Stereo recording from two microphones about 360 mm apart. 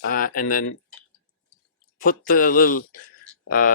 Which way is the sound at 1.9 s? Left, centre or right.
Left.